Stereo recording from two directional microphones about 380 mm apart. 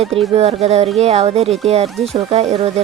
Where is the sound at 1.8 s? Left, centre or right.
Centre.